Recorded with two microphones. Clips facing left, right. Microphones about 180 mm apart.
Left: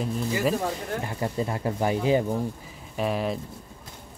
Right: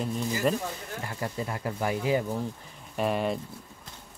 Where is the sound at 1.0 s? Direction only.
25° left (ahead or behind).